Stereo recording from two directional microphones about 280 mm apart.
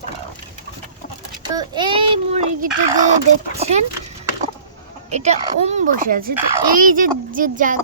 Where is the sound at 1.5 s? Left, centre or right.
Centre.